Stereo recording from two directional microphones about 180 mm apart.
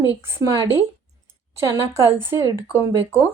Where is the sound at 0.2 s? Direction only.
15° right (ahead or behind).